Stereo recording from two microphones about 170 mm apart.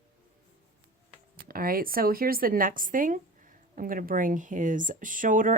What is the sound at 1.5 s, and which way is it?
A woman's voice, 60° right (ahead or behind).